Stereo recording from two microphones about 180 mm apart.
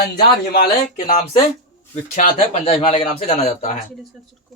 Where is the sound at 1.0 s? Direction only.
35° left (ahead or behind).